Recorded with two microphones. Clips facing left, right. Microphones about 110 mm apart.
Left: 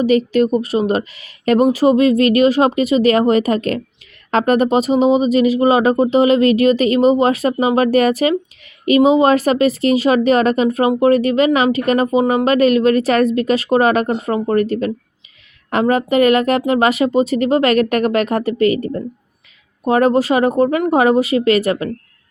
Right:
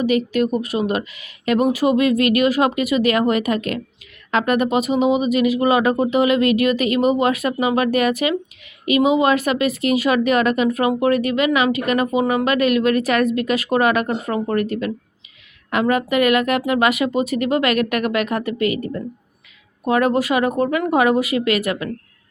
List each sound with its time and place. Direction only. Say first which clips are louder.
0.0 s speech: left 4 dB; 30° left (ahead or behind)